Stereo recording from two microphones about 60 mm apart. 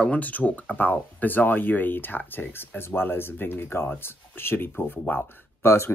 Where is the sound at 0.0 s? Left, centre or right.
Left.